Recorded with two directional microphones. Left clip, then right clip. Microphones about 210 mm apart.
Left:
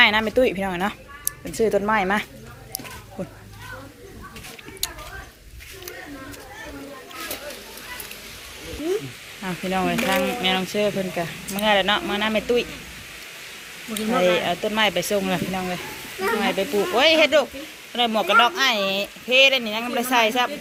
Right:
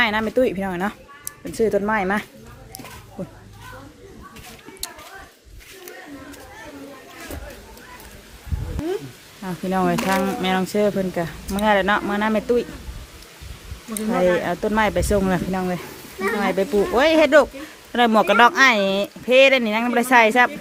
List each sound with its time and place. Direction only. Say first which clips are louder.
0.0 s a woman's voice: left 2 dB; 25° right (ahead or behind)
4.8 s a sound: left 4 dB; 30° right (ahead or behind)
9.6 s a woman's voice: right 2 dB; 25° right (ahead or behind)
10.2 s speech: even; 35° right (ahead or behind)
14.1 s speech: right 1 dB; 30° right (ahead or behind); by 20.5 s 50° right (ahead or behind)